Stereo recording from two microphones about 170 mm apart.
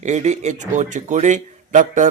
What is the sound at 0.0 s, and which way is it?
A man's voice, 45° right (ahead or behind).